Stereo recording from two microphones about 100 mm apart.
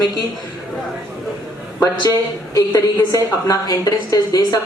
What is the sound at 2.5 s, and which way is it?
A woman's voice, 35° left (ahead or behind).